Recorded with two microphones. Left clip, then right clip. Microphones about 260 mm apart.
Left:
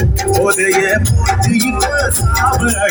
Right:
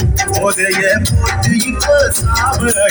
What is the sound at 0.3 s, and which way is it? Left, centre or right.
Music, left.